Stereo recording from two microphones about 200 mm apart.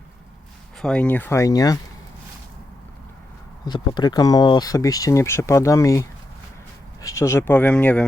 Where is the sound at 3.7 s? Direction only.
20° left (ahead or behind).